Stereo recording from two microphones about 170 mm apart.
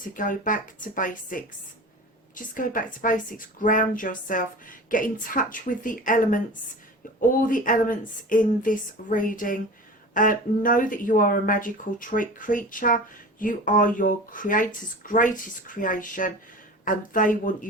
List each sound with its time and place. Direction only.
0.0 s a woman's voice: 50° left (ahead or behind)